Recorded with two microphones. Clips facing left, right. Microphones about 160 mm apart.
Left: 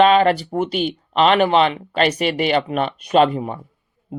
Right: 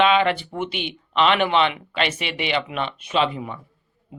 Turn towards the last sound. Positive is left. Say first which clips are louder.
# left 7 dB
turn(degrees=45)  # may be behind; listen again after turning